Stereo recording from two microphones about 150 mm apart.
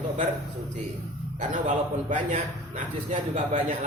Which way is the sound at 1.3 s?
55° right (ahead or behind).